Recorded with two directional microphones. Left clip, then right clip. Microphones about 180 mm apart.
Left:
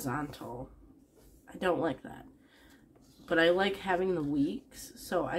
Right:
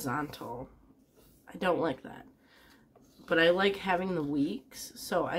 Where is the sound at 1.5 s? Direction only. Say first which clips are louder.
Right 1 dB; 15° right (ahead or behind).